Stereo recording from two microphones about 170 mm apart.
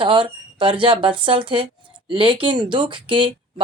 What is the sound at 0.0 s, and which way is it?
A woman's voice, 30° right (ahead or behind).